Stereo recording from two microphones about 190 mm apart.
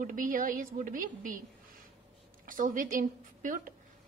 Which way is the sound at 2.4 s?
45° right (ahead or behind).